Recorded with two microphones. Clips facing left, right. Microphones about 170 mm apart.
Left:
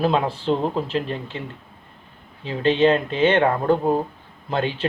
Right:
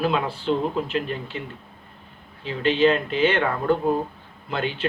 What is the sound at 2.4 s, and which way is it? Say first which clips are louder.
Speech: left 2 dB; 35° left (ahead or behind).